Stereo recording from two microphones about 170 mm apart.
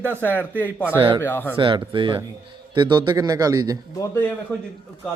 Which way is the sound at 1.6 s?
30° right (ahead or behind).